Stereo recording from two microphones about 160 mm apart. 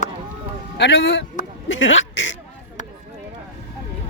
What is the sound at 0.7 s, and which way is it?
Speech, 90° left.